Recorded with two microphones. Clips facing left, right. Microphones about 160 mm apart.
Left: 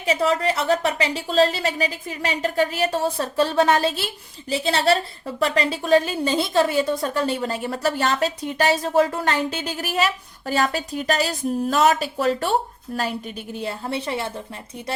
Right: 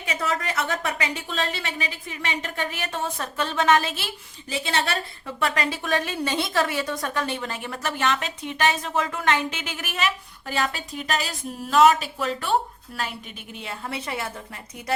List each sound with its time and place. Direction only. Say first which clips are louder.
0.0 s a woman's voice: left 7 dB; 30° left (ahead or behind)